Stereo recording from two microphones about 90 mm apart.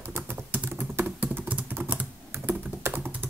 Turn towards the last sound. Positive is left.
turn(degrees=-20)  # may be behind; listen again after turning